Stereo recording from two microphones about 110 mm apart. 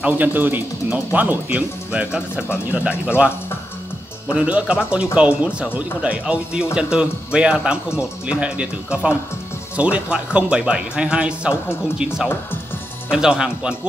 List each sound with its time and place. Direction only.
0.0 s speech: 15° right (ahead or behind)
4.3 s speech: 10° right (ahead or behind)